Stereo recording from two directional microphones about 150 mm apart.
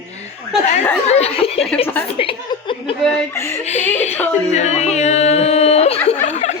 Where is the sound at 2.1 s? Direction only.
35° left (ahead or behind).